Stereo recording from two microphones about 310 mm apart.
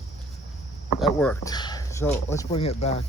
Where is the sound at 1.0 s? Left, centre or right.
Centre; by 3.0 s left.